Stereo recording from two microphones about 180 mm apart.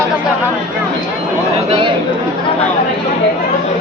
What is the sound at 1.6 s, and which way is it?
Chatter, 30° right (ahead or behind).